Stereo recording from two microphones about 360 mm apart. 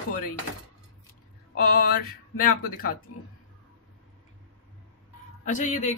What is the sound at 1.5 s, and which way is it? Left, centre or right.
Speech, left.